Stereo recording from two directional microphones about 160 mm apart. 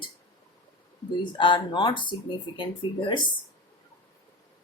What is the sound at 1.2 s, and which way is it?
Speech, 30° left (ahead or behind).